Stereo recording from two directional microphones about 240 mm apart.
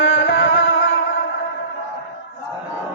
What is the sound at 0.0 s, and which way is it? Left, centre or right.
Music, left.